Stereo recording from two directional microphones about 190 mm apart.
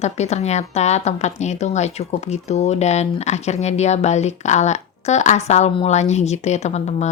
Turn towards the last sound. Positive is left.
turn(degrees=35)  # may be behind; listen again after turning